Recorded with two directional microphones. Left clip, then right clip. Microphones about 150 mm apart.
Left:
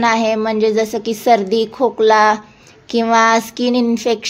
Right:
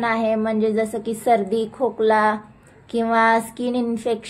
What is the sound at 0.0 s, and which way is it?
A woman's voice, 30° left (ahead or behind).